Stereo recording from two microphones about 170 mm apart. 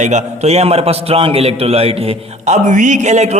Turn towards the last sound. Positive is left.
turn(degrees=-40)  # may be behind; listen again after turning